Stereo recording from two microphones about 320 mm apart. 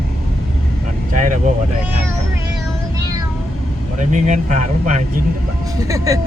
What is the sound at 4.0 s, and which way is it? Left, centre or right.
Speech, right.